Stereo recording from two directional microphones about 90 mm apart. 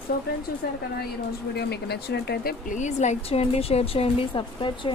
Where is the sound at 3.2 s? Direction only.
90° left; by 4.9 s 65° left (ahead or behind).